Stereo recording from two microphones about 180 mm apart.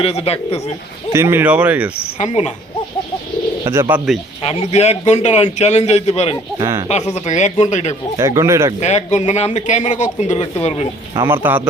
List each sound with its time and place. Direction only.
0.0 s a man's voice: 35° left (ahead or behind)
1.1 s speech: 15° right (ahead or behind)
2.1 s a man's voice: 40° left (ahead or behind)
3.6 s speech: 15° right (ahead or behind)
4.4 s a man's voice: 35° left (ahead or behind)
6.6 s speech: 15° right (ahead or behind)
6.8 s a man's voice: 40° left (ahead or behind)
8.2 s speech: 15° right (ahead or behind)
8.8 s a man's voice: 40° left (ahead or behind)
11.1 s speech: 15° right (ahead or behind)